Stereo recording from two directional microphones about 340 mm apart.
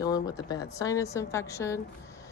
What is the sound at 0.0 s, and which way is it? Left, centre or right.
Speech, centre.